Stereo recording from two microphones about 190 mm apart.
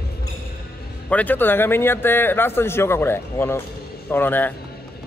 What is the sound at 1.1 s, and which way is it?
Speech, 10° left (ahead or behind).